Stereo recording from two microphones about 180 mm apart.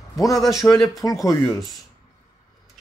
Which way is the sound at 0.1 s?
20° left (ahead or behind).